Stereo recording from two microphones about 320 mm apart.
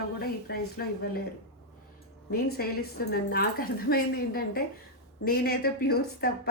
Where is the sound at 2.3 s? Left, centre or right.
Left.